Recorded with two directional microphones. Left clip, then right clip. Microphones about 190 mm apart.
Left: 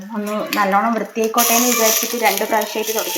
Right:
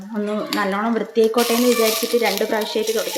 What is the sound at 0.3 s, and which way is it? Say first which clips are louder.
Speech: left 7 dB; 20° right (ahead or behind).